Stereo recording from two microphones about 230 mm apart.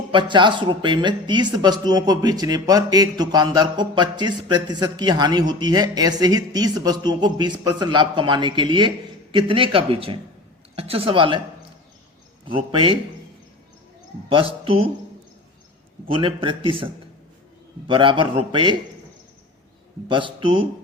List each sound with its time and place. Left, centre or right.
0.1 s speech: right
12.5 s speech: right
14.3 s speech: right
16.0 s speech: right
20.1 s speech: right